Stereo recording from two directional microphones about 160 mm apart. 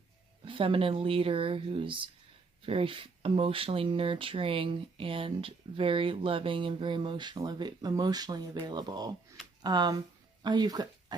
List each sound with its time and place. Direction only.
0.4 s speech: 35° right (ahead or behind)